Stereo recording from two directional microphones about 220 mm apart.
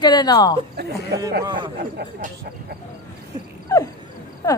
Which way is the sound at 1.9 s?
45° right (ahead or behind).